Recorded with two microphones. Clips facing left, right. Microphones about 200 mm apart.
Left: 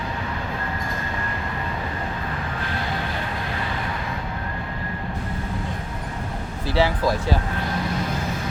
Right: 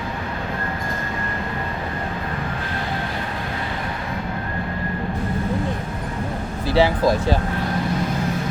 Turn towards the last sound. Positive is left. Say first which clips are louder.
# right 4 dB
turn(degrees=-20)  # may be behind; listen again after turning